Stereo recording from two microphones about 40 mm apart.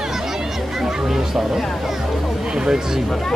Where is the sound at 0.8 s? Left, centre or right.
Centre.